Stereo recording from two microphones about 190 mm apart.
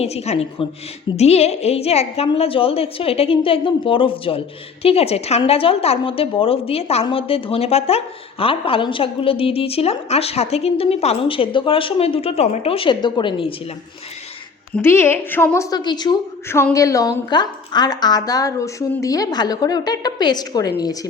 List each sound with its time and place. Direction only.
0.0 s a woman's voice: 35° left (ahead or behind)
14.8 s a woman's voice: 10° left (ahead or behind)